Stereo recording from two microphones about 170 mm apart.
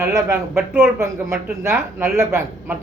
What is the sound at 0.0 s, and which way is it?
A man's voice, 15° right (ahead or behind).